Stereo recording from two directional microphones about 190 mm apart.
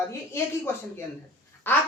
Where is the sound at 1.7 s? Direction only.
10° left (ahead or behind).